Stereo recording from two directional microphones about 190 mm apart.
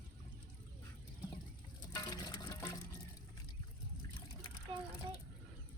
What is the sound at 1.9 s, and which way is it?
Water, 20° left (ahead or behind).